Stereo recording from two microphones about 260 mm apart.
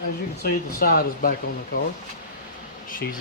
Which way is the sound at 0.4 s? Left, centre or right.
Left.